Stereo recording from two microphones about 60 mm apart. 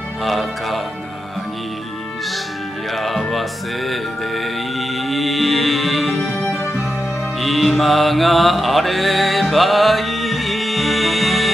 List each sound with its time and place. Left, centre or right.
0.2 s speech: centre
3.0 s music: centre
6.3 s music: left
7.3 s mantra: centre